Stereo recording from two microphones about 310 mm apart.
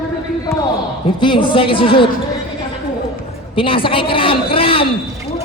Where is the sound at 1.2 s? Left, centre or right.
Centre.